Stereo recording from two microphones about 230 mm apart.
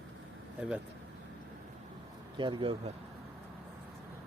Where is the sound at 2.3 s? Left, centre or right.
Right.